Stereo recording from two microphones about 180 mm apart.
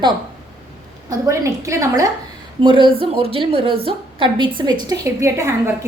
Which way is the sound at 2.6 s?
25° right (ahead or behind).